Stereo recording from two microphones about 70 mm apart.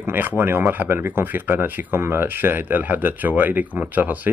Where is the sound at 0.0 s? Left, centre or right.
Right.